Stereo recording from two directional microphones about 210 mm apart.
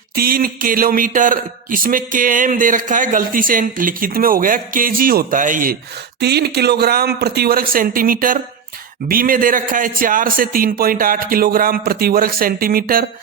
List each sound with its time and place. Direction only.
0.2 s a man's voice: 45° right (ahead or behind)
6.1 s a man's voice: 50° right (ahead or behind)